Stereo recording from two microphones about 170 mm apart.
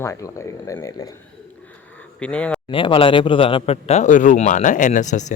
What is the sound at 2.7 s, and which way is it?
A man's voice, 30° left (ahead or behind).